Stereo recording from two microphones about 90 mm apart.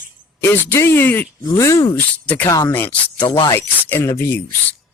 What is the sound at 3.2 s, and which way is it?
Speech, 75° left (ahead or behind).